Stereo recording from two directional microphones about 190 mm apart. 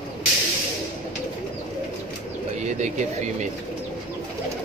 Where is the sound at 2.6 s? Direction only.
40° right (ahead or behind).